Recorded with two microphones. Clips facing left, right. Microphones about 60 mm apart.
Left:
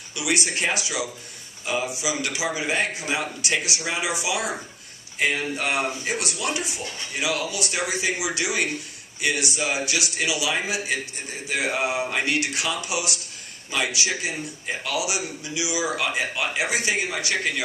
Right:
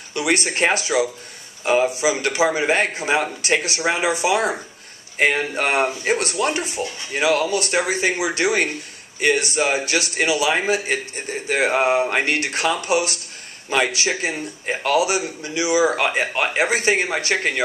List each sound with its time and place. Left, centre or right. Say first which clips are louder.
0.1 s a man's voice: right 5 dB; right